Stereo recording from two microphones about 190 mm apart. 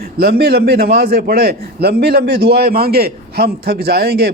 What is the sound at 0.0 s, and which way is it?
A man's voice, 55° right (ahead or behind).